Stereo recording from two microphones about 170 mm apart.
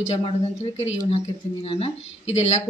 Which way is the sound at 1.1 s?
35° left (ahead or behind).